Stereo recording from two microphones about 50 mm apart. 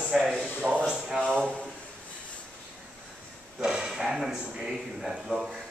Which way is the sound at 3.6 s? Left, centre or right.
Centre.